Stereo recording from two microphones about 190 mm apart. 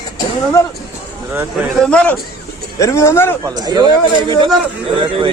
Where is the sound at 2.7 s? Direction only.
15° left (ahead or behind).